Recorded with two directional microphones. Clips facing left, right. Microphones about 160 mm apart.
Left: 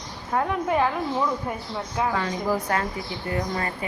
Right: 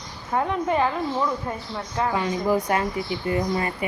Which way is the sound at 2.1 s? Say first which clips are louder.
Right 3 dB; 15° right (ahead or behind).